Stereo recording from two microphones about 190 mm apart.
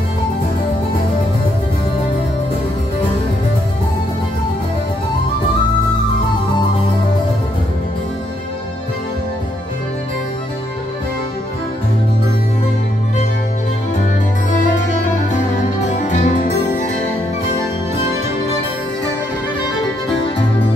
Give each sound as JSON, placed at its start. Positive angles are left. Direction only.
{"t": 14.9, "sound": "music", "side_deg": 40}